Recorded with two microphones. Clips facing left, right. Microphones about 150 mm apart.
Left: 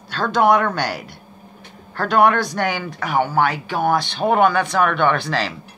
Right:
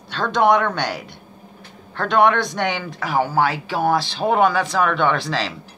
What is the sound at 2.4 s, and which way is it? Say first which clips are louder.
Speech: left 1 dB; 20° right (ahead or behind).